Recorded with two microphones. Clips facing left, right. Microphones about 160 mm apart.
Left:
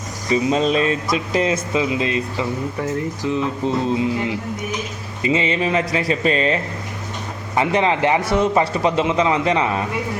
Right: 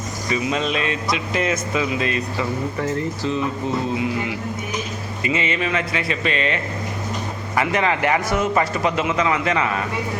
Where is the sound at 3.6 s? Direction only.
30° left (ahead or behind).